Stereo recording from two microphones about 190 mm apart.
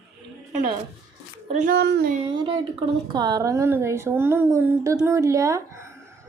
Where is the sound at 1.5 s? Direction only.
40° right (ahead or behind).